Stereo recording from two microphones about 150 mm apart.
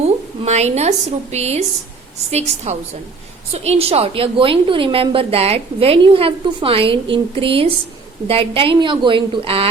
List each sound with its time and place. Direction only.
0.4 s a woman's voice: 45° right (ahead or behind)